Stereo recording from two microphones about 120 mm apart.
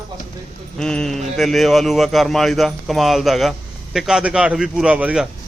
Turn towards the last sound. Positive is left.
turn(degrees=-10)  # may be behind; listen again after turning